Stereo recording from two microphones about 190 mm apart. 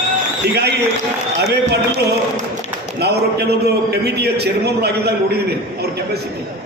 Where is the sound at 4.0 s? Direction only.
60° right (ahead or behind).